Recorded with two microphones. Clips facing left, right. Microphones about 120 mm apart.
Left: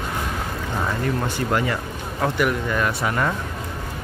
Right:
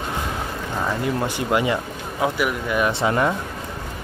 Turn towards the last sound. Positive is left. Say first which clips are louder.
# right 3 dB
turn(degrees=-20)  # may be behind; listen again after turning